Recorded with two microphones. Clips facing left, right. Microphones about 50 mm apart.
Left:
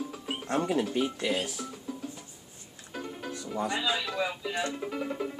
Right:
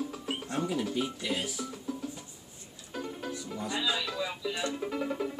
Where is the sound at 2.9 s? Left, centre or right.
Centre.